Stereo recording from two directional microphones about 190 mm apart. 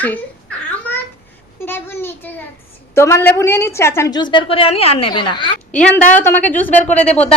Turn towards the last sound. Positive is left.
turn(degrees=5)  # may be behind; listen again after turning